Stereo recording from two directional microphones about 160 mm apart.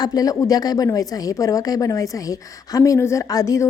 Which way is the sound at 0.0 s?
25° left (ahead or behind).